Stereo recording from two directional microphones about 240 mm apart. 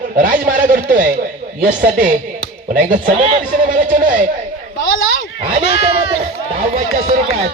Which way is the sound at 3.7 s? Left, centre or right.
Right.